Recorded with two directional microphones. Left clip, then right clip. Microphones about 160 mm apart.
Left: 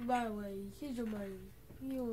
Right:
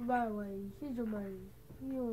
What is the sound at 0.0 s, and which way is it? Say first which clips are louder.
A woman's voice: right 1 dB; 10° right (ahead or behind).